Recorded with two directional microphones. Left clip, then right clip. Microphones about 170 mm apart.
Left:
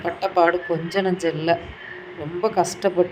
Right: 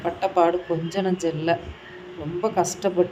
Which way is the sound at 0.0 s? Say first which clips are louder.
Left 2 dB; 20° left (ahead or behind).